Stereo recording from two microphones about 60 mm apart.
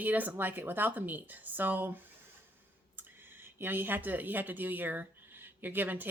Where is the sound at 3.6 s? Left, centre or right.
Right.